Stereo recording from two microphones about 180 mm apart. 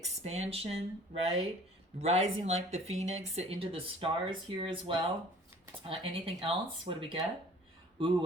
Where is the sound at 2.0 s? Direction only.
40° right (ahead or behind).